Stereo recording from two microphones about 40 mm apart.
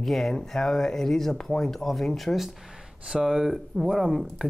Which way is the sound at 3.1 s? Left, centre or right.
Centre.